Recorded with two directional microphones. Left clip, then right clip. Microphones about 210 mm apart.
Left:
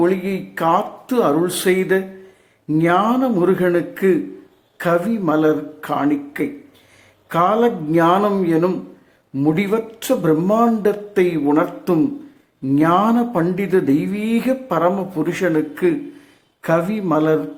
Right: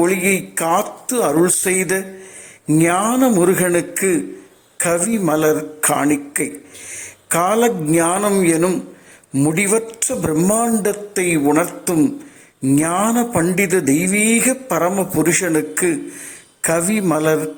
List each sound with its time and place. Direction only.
0.0 s a man's voice: 20° right (ahead or behind)